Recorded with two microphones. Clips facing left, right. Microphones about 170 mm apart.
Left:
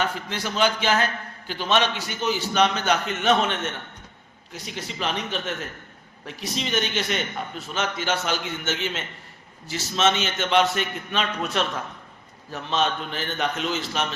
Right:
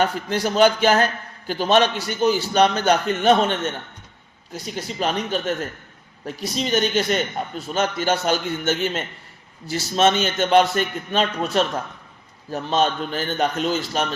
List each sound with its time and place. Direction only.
0.0 s a man's voice: 40° right (ahead or behind)